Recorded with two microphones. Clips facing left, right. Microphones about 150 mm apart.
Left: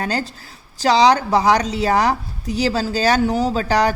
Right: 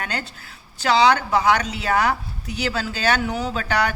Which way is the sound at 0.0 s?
35° left (ahead or behind).